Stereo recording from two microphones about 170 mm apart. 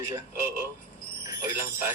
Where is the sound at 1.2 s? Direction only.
15° right (ahead or behind).